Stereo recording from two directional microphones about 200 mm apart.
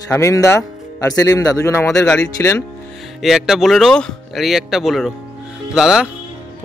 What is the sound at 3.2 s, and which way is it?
Speech, centre (ahead or behind).